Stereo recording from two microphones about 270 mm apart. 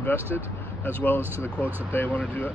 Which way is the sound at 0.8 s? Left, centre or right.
Centre.